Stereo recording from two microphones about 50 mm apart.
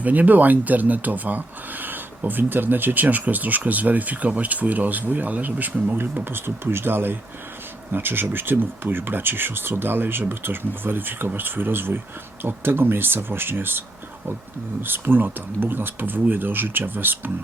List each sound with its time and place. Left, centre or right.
0.0 s speech: right